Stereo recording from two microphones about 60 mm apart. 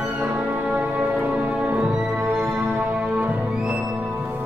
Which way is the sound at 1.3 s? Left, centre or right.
Centre.